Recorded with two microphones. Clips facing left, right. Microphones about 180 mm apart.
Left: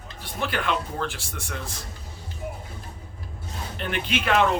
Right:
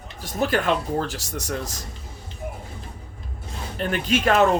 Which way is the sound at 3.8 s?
40° right (ahead or behind).